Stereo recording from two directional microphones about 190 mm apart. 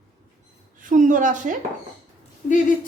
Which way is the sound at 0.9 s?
45° right (ahead or behind).